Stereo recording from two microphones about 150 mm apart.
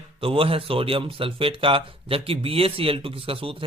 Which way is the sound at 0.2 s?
35° right (ahead or behind).